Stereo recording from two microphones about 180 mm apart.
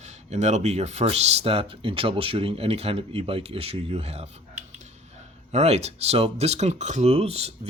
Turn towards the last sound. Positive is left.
turn(degrees=-35)  # may be behind; listen again after turning